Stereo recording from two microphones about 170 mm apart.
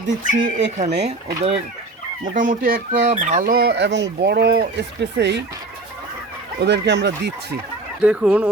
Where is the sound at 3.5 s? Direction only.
75° right (ahead or behind).